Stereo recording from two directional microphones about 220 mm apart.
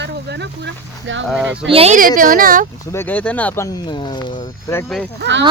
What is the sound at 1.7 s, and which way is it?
Speech, 30° right (ahead or behind).